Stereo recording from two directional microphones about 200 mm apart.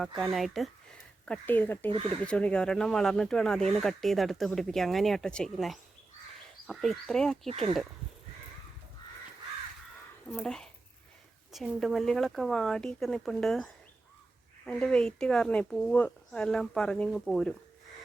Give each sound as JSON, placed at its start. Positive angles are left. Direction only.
{"t": 0.2, "sound": "speech", "side_deg": 0}
{"t": 7.4, "sound": "speech", "side_deg": -30}
{"t": 10.4, "sound": "speech", "side_deg": 5}